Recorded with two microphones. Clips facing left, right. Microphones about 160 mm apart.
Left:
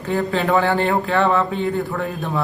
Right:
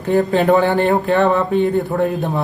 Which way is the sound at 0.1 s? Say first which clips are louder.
Right 6 dB; 55° right (ahead or behind).